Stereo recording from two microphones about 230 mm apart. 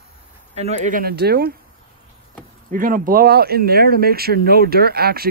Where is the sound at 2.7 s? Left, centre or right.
Right.